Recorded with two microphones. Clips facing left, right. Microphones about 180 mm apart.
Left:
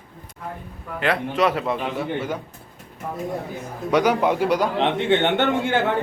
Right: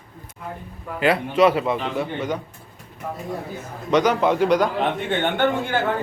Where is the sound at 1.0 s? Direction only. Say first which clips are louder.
Right 4 dB; centre (ahead or behind).